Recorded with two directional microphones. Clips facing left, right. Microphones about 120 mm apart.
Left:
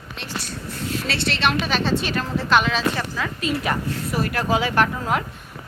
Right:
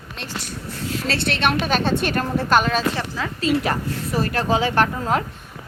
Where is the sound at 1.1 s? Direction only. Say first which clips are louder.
Right 2 dB; 50° right (ahead or behind).